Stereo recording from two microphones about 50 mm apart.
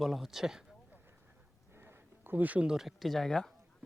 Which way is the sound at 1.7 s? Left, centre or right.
Right.